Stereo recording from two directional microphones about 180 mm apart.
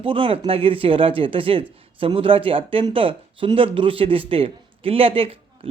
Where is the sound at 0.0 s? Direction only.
30° right (ahead or behind).